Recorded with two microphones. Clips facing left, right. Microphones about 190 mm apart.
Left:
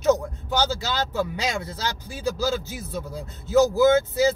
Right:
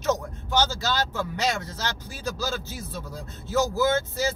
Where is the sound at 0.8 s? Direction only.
15° left (ahead or behind).